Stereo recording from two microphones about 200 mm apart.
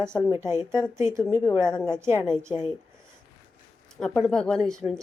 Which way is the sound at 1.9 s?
15° right (ahead or behind).